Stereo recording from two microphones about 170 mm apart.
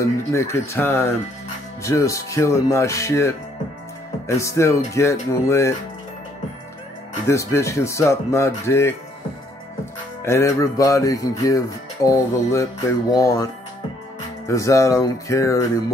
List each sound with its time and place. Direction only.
0.0 s speech: 15° left (ahead or behind)
7.2 s speech: 15° left (ahead or behind)
10.2 s speech: 15° left (ahead or behind)
14.5 s speech: 20° left (ahead or behind)